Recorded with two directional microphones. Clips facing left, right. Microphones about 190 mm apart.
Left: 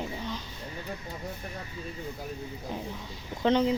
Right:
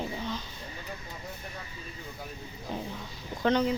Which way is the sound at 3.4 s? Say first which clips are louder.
Left 2 dB; 25° left (ahead or behind).